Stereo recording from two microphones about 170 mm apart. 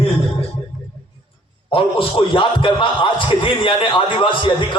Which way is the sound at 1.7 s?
30° left (ahead or behind).